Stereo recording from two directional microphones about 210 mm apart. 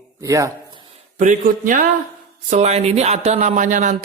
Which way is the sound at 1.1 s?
40° right (ahead or behind).